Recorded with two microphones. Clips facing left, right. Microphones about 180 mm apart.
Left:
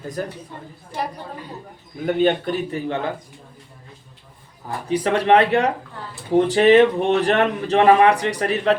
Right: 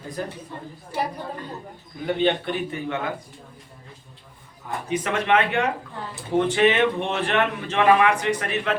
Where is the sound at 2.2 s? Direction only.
35° left (ahead or behind).